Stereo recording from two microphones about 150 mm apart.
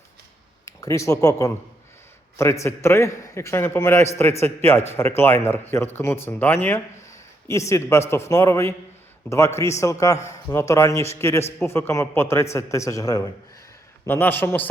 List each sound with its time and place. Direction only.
0.6 s a man's voice: 20° left (ahead or behind)
9.8 s a man's voice: 20° left (ahead or behind)
14.0 s a man's voice: 15° left (ahead or behind)